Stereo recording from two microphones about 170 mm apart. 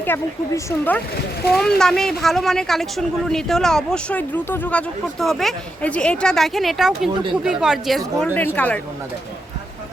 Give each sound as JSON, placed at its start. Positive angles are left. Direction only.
{"t": 0.0, "sound": "speech", "side_deg": 10}
{"t": 7.1, "sound": "speech", "side_deg": -30}
{"t": 7.4, "sound": "speech", "side_deg": -5}